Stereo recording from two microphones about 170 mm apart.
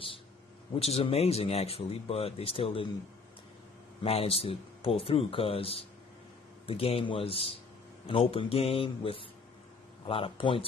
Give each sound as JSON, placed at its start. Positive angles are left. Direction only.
{"t": 0.7, "sound": "a man's voice", "side_deg": 35}
{"t": 4.0, "sound": "a man's voice", "side_deg": 35}